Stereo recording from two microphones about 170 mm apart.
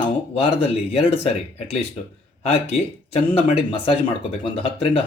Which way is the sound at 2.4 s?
35° left (ahead or behind).